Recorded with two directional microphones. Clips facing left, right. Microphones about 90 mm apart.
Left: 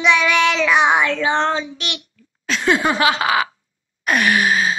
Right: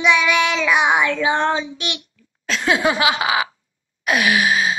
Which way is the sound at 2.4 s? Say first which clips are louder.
Left 1 dB; centre (ahead or behind).